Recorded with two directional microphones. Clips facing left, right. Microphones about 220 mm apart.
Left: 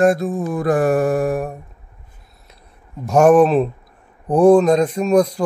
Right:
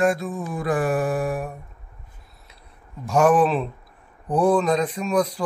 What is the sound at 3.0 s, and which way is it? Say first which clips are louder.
Speech: left 6 dB; 45° left (ahead or behind).